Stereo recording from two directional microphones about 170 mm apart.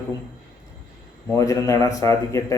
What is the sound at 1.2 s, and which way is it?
Speech, 20° left (ahead or behind).